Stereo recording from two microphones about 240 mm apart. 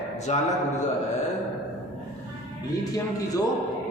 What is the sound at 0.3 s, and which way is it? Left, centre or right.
Speech, left.